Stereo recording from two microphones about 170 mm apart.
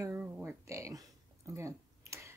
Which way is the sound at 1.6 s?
15° right (ahead or behind).